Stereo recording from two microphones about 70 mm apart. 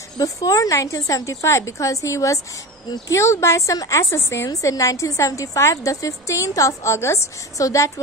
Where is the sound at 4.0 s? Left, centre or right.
Left.